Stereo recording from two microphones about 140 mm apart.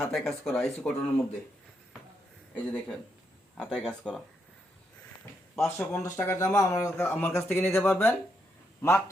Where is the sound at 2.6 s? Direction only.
10° left (ahead or behind).